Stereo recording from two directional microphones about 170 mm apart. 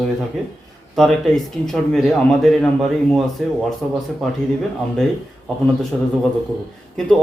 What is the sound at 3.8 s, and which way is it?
Speech, 5° left (ahead or behind).